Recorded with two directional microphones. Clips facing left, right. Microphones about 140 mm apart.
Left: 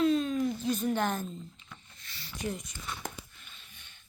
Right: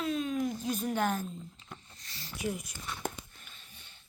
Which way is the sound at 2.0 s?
40° right (ahead or behind).